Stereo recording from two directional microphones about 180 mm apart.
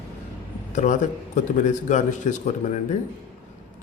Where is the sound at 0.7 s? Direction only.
45° left (ahead or behind).